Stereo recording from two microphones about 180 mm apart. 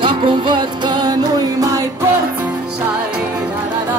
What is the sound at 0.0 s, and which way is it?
Music, 25° right (ahead or behind).